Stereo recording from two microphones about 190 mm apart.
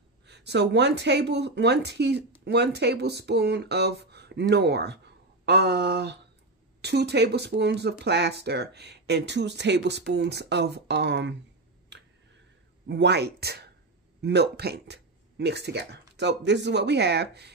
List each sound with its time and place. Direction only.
0.3 s speech: 65° right (ahead or behind)
11.9 s tick: 70° right (ahead or behind)
12.8 s speech: 65° right (ahead or behind)